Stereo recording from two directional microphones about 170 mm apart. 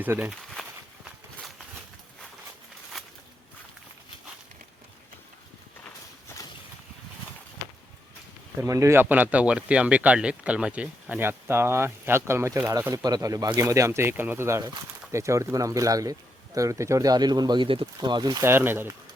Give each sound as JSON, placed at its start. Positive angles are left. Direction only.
{"t": 0.0, "sound": "speech", "side_deg": -10}
{"t": 2.9, "sound": "a sound", "side_deg": 0}
{"t": 8.6, "sound": "speech", "side_deg": -15}